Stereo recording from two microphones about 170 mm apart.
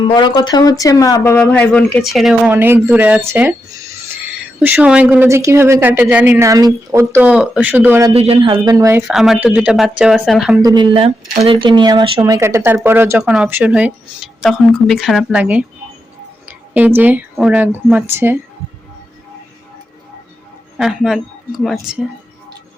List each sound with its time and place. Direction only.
0.0 s a woman's voice: 25° left (ahead or behind); by 8.1 s 15° right (ahead or behind)
8.1 s speech: 35° right (ahead or behind); by 9.0 s 20° right (ahead or behind)
9.0 s speech: centre (ahead or behind)
10.6 s speech: 25° right (ahead or behind)
12.2 s a woman's voice: 20° right (ahead or behind)
20.7 s speech: 5° right (ahead or behind)